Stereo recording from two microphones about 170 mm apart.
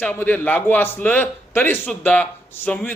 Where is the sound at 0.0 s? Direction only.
10° left (ahead or behind).